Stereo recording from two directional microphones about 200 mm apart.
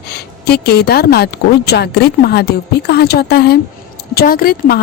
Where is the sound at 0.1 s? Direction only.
55° left (ahead or behind).